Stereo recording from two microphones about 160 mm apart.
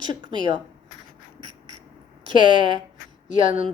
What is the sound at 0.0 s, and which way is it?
Speech, 25° right (ahead or behind).